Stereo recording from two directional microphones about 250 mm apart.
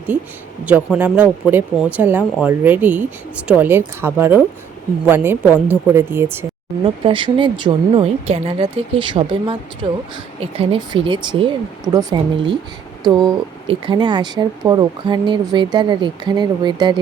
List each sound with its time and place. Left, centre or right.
0.6 s speech: centre
6.8 s speech: right